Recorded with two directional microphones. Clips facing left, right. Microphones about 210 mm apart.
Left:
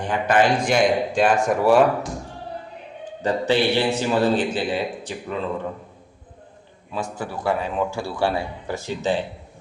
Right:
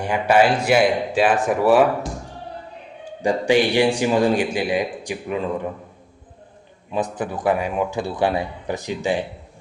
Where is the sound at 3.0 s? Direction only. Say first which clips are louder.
Right 2 dB; 10° right (ahead or behind).